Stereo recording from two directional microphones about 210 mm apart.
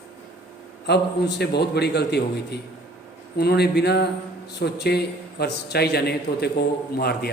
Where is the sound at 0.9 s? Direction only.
50° left (ahead or behind).